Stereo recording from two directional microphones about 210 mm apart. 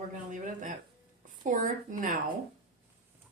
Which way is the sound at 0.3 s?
35° right (ahead or behind).